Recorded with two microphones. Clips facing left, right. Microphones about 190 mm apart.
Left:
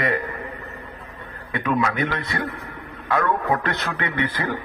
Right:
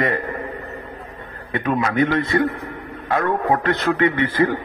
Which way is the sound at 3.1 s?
40° right (ahead or behind).